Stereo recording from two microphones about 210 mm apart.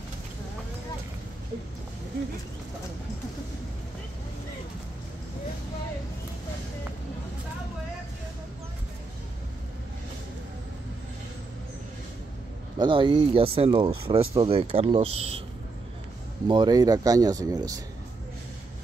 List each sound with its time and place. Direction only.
12.7 s speech: 25° right (ahead or behind)
16.4 s speech: 20° right (ahead or behind)